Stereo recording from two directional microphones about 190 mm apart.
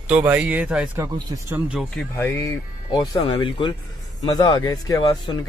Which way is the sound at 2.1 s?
15° left (ahead or behind).